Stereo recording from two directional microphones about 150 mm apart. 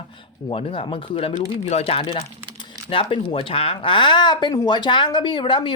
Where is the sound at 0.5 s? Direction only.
35° left (ahead or behind).